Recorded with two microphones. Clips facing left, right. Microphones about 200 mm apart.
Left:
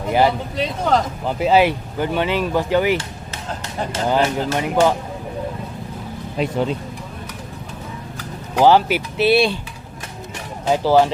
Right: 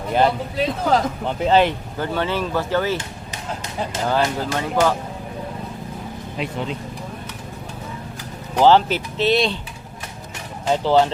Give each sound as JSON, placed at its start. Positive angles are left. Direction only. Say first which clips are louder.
{"t": 0.1, "sound": "speech", "louder": "left 1 dB", "side_deg": 10}
{"t": 4.1, "sound": "speech", "louder": "left 3 dB", "side_deg": 15}
{"t": 6.4, "sound": "speech", "louder": "left 6 dB", "side_deg": 40}
{"t": 8.5, "sound": "speech", "louder": "left 1 dB", "side_deg": 10}
{"t": 10.7, "sound": "speech", "louder": "left 2 dB", "side_deg": 10}